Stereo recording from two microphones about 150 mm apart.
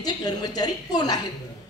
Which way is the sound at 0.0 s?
25° left (ahead or behind).